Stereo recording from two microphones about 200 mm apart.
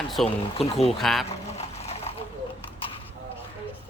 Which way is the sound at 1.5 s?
30° left (ahead or behind).